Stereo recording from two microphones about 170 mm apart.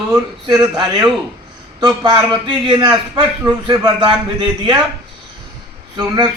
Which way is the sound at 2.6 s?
25° right (ahead or behind).